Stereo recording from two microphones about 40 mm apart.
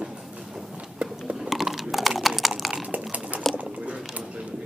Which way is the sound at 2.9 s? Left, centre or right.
Right.